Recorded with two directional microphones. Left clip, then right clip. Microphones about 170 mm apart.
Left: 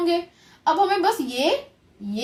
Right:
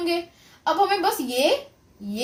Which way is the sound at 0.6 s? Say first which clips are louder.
Left 1 dB; 25° right (ahead or behind).